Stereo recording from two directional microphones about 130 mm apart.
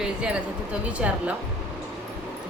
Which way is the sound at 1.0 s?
5° right (ahead or behind).